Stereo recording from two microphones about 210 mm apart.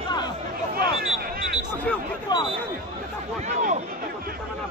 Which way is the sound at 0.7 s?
45° right (ahead or behind).